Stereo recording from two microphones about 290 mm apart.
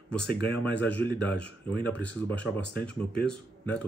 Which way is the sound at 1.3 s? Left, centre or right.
Right.